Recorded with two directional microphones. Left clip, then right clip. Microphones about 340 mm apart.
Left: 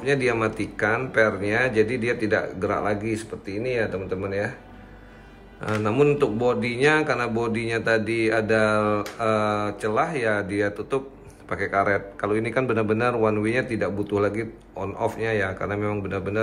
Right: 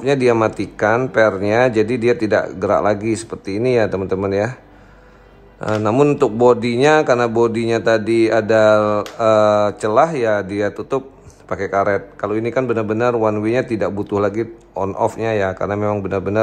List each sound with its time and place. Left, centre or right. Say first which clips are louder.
0.0 s speech: right 8 dB; centre
5.6 s speech: right 6 dB; centre